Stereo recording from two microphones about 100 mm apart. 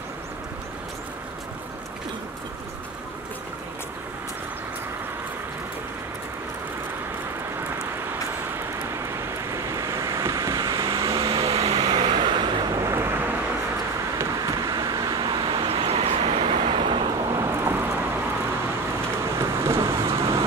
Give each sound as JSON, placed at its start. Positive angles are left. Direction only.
{"t": 9.5, "sound": "vehicle", "side_deg": -30}
{"t": 11.1, "sound": "a sound", "side_deg": -70}
{"t": 11.8, "sound": "vehicle", "side_deg": -45}
{"t": 12.7, "sound": "vehicle", "side_deg": -30}
{"t": 14.1, "sound": "vehicle", "side_deg": -35}
{"t": 17.4, "sound": "vehicle", "side_deg": -25}
{"t": 18.9, "sound": "vehicle", "side_deg": -30}
{"t": 20.1, "sound": "vehicle", "side_deg": -70}